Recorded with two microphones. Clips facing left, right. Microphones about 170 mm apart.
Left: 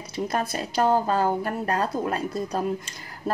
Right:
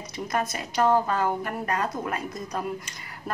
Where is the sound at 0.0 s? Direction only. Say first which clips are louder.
Left 2 dB; 30° left (ahead or behind).